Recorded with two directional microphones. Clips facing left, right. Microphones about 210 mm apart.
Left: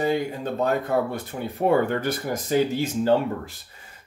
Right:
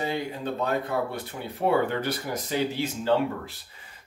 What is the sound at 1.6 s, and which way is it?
Speech, 50° left (ahead or behind).